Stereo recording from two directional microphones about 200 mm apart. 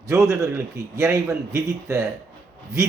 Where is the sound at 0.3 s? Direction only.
15° right (ahead or behind).